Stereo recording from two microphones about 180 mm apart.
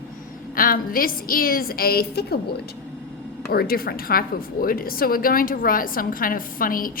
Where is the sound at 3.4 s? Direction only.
60° left (ahead or behind).